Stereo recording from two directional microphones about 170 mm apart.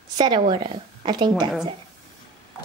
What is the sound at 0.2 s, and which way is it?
A woman's voice, 30° right (ahead or behind).